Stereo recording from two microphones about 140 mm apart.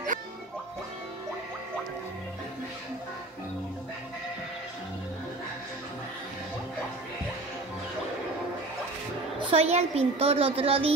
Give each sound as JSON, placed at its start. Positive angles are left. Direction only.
{"t": 9.5, "sound": "a woman's voice", "side_deg": -50}